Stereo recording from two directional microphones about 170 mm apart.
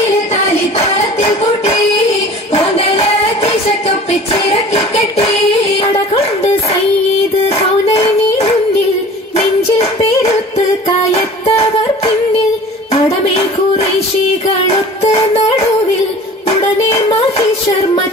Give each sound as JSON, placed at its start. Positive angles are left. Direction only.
{"t": 0.7, "sound": "music", "side_deg": 35}
{"t": 7.4, "sound": "yodeling", "side_deg": 35}
{"t": 9.8, "sound": "music", "side_deg": 35}